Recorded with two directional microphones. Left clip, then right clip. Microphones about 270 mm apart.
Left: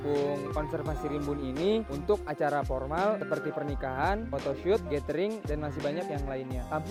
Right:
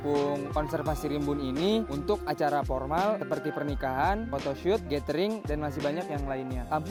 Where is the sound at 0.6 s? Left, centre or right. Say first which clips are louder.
Right 3 dB; right.